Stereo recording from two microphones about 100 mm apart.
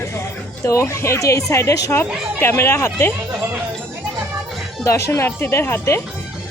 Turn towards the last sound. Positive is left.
turn(degrees=25)  # may be behind; listen again after turning